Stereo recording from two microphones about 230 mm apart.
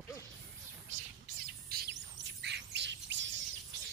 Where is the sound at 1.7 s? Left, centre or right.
Right.